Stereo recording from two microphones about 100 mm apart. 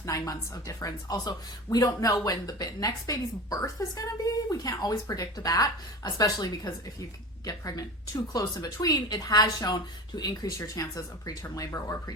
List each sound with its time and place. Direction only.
0.0 s a woman's voice: 35° left (ahead or behind)